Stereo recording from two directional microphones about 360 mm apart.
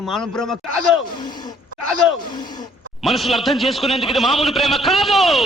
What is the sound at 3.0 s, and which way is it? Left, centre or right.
A man's voice, centre.